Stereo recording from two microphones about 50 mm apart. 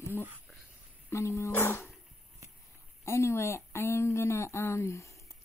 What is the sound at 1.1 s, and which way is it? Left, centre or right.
Speech, left.